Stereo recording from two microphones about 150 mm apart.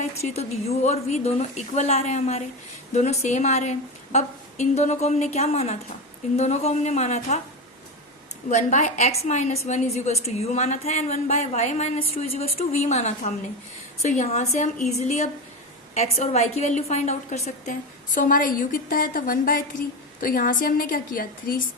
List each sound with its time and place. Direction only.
0.0 s a woman's voice: 45° left (ahead or behind)
8.4 s a woman's voice: 55° left (ahead or behind); by 21.6 s 75° left (ahead or behind)